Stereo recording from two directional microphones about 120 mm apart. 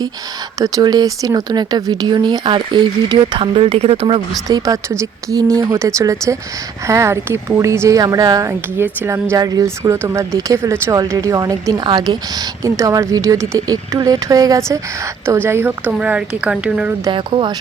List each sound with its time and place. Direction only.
0.6 s speech: 30° right (ahead or behind); by 4.2 s 50° right (ahead or behind)
4.4 s speech: 30° right (ahead or behind)
9.3 s speech: 30° right (ahead or behind)
12.6 s speech: 25° right (ahead or behind)
15.4 s speech: 20° right (ahead or behind)
17.1 s speech: 45° right (ahead or behind)